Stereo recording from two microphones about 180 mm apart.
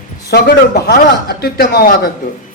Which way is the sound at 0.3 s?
65° left (ahead or behind).